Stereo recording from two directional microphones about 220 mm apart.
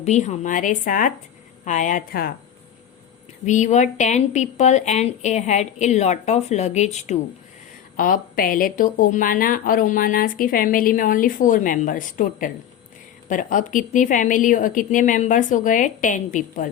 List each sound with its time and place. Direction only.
0.0 s speech: 30° left (ahead or behind)
3.4 s speech: 35° left (ahead or behind)